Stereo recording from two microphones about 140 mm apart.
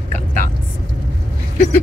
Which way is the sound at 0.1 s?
60° right (ahead or behind).